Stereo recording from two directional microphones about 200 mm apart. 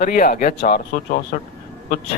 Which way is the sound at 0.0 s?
45° left (ahead or behind).